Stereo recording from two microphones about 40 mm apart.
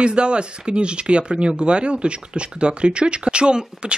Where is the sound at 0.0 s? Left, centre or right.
Right.